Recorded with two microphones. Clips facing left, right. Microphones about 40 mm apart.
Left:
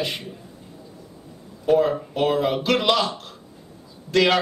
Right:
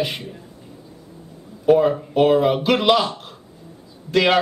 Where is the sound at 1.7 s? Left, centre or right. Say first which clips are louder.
Right 3 dB; centre.